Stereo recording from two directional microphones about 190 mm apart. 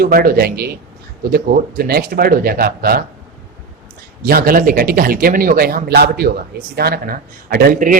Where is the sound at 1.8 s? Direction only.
55° right (ahead or behind).